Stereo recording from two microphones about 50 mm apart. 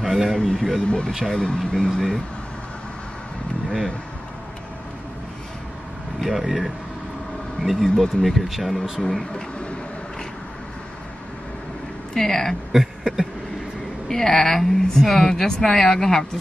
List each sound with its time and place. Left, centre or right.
0.0 s a sound: centre
0.4 s a woman's voice: centre
0.8 s a woman's voice: centre
6.2 s speech: centre
9.0 s a woman's voice: centre
12.1 s speech: centre
12.7 s a sound: centre
14.0 s a woman's voice: centre